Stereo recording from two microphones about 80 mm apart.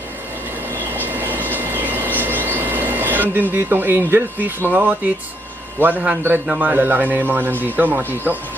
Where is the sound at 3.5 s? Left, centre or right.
Right.